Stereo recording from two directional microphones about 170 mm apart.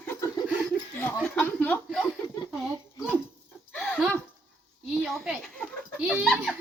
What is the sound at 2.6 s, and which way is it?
Speech, 5° right (ahead or behind).